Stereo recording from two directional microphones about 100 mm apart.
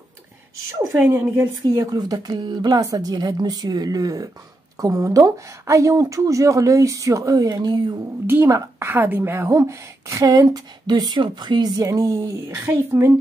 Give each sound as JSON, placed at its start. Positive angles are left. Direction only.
{"t": 1.1, "sound": "speech", "side_deg": -25}
{"t": 1.9, "sound": "a woman's voice", "side_deg": -40}
{"t": 8.8, "sound": "a woman's voice", "side_deg": -20}
{"t": 12.6, "sound": "speech", "side_deg": -20}